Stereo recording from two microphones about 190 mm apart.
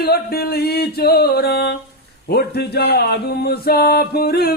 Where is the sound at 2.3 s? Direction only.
55° left (ahead or behind).